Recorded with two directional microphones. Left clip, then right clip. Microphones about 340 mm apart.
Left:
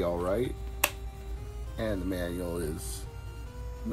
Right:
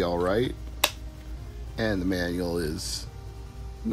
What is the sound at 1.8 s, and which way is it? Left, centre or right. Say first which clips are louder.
Speech: right 5 dB; centre.